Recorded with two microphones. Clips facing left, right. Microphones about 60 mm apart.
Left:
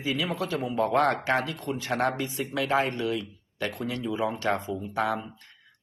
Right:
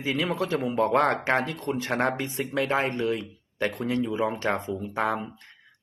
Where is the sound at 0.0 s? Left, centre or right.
Right.